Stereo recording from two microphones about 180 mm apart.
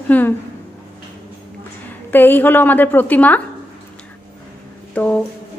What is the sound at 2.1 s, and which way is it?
A woman's voice, 10° left (ahead or behind).